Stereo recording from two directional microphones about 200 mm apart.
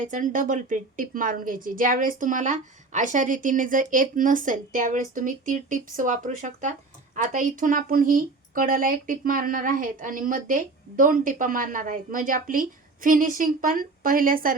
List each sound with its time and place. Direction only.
0.0 s a woman's voice: 40° right (ahead or behind)